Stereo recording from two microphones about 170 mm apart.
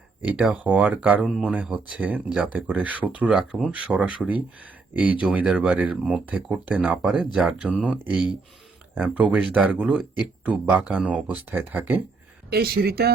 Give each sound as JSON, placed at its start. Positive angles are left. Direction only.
{"t": 0.2, "sound": "speech", "side_deg": -5}
{"t": 12.5, "sound": "speech", "side_deg": -65}